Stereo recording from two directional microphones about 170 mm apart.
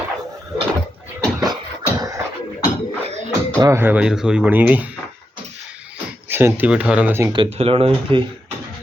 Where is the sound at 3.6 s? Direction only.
15° right (ahead or behind).